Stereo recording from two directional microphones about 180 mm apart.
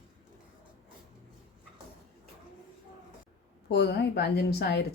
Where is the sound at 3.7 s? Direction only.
70° left (ahead or behind).